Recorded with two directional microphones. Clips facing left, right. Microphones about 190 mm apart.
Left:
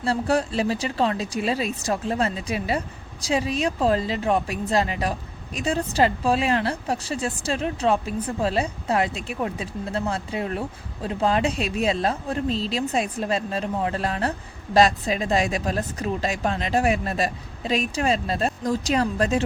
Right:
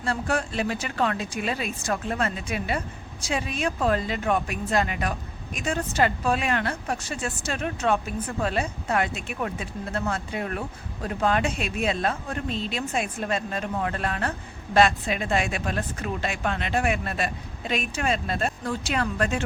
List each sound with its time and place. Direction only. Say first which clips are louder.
0.0 s speech: left 4 dB; 35° left (ahead or behind)